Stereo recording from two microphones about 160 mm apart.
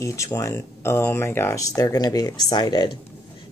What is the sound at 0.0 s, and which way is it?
Speech, 20° left (ahead or behind).